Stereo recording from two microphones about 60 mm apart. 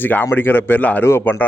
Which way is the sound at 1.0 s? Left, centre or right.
Left.